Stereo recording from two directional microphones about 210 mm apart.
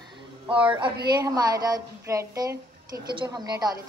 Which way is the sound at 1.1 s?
20° right (ahead or behind).